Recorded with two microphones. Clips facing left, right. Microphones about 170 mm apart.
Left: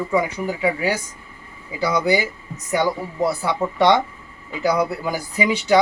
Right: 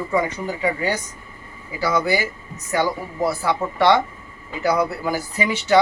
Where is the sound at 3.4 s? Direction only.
15° left (ahead or behind).